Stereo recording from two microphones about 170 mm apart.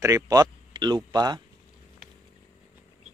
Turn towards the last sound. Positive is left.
turn(degrees=-25)  # may be behind; listen again after turning